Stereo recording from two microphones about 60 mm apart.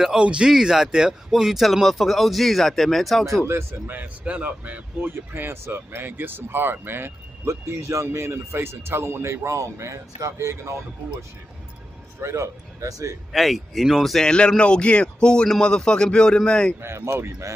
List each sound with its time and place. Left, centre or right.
0.0 s speech: centre
3.4 s speech: right
3.9 s speech: right
5.1 s speech: right
7.4 s speech: right
12.2 s a man's voice: right
13.3 s speech: centre
14.2 s a man's voice: centre
16.8 s speech: right